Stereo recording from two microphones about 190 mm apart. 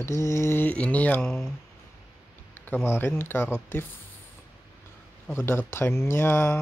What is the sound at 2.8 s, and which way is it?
Speech, 10° left (ahead or behind).